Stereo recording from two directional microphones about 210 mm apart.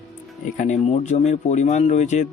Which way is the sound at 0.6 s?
35° left (ahead or behind).